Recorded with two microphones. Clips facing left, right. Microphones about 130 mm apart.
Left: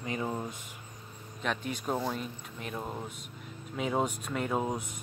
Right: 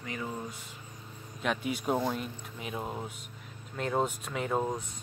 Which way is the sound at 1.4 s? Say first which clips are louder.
Right 2 dB; 5° right (ahead or behind).